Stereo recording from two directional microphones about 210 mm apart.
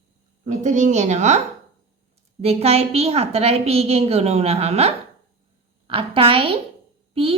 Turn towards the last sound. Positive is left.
turn(degrees=-25)  # may be behind; listen again after turning